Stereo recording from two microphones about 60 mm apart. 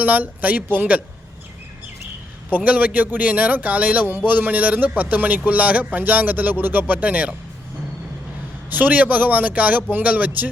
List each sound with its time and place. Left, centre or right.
0.0 s speech: right
2.6 s a man's voice: right
8.7 s speech: right